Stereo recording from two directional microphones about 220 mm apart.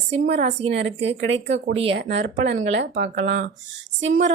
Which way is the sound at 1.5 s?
60° right (ahead or behind).